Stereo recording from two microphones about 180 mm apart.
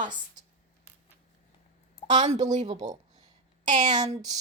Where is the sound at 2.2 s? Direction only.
40° right (ahead or behind).